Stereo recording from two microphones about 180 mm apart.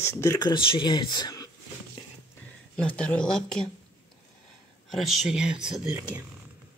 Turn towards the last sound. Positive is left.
turn(degrees=-5)  # may be behind; listen again after turning